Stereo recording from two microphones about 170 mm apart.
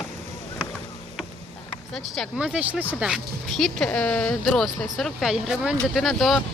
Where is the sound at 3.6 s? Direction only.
5° left (ahead or behind).